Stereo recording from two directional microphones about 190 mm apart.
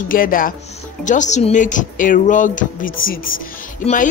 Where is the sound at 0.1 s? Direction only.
45° left (ahead or behind).